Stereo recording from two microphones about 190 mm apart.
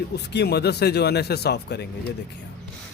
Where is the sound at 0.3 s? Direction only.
60° left (ahead or behind).